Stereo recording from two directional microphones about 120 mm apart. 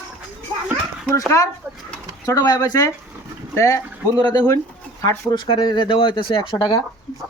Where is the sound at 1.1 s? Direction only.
25° left (ahead or behind).